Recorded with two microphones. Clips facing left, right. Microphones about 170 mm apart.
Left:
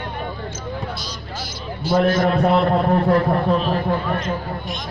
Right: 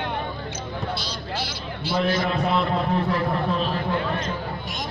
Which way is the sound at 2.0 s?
50° left (ahead or behind).